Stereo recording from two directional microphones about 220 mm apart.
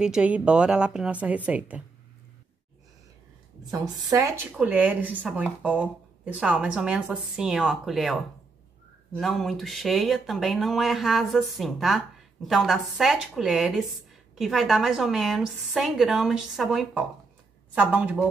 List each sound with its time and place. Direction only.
0.0 s speech: 5° right (ahead or behind)
3.8 s speech: 15° right (ahead or behind)